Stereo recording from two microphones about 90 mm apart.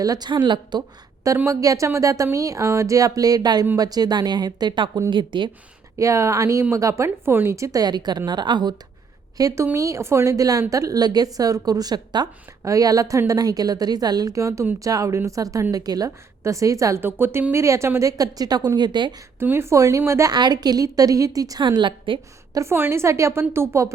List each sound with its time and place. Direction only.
0.0 s speech: 45° right (ahead or behind)
0.3 s a woman's voice: 60° right (ahead or behind)
1.5 s a woman's voice: 35° right (ahead or behind); by 5.5 s 65° right (ahead or behind)
6.0 s a woman's voice: 35° right (ahead or behind); by 8.7 s 55° right (ahead or behind)
9.4 s a woman's voice: 40° right (ahead or behind)
17.0 s a woman's voice: 25° right (ahead or behind)
18.2 s speech: 45° right (ahead or behind)
19.4 s a woman's voice: 25° right (ahead or behind)
20.3 s a woman's voice: 50° right (ahead or behind)
21.6 s a woman's voice: 60° right (ahead or behind)
22.5 s a woman's voice: 30° right (ahead or behind)